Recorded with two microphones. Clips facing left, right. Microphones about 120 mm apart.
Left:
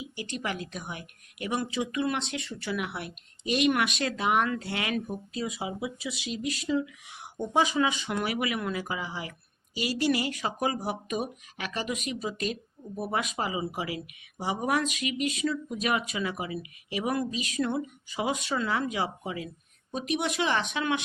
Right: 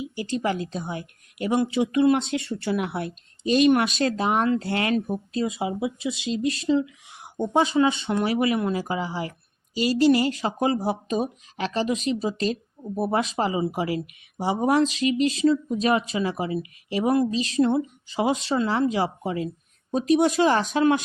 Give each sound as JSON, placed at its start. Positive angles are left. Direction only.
{"t": 0.3, "sound": "speech", "side_deg": -30}
{"t": 9.7, "sound": "speech", "side_deg": 15}
{"t": 10.1, "sound": "speech", "side_deg": -30}